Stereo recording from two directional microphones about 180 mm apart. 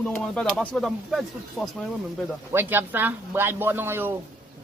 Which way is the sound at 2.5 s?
10° right (ahead or behind).